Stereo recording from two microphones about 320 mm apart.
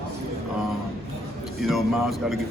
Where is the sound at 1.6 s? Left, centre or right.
Centre.